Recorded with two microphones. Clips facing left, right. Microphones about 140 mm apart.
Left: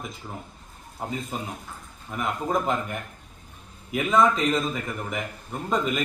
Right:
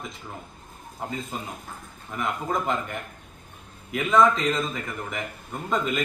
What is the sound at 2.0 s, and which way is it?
A man's voice, centre (ahead or behind).